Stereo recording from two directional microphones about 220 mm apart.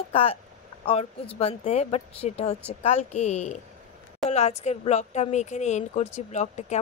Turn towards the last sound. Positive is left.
turn(degrees=30)  # may be behind; listen again after turning